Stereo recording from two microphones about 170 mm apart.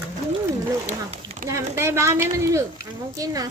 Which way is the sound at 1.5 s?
15° right (ahead or behind).